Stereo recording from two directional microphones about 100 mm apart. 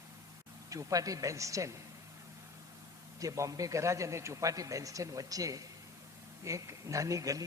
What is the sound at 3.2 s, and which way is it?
A man's voice, 35° right (ahead or behind).